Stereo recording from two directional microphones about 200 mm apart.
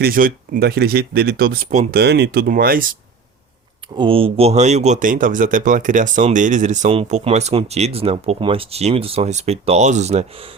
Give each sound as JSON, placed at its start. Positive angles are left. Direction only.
{"t": 0.0, "sound": "speech", "side_deg": -45}
{"t": 3.9, "sound": "speech", "side_deg": -25}